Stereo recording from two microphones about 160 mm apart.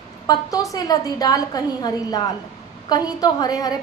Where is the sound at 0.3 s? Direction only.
20° left (ahead or behind).